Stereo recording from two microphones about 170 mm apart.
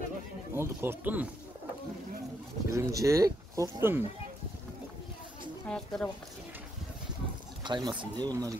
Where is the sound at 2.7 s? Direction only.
20° right (ahead or behind).